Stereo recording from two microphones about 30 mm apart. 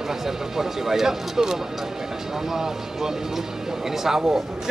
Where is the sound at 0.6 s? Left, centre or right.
Centre.